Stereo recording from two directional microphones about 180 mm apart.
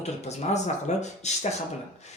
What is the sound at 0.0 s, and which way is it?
Speech, 40° left (ahead or behind).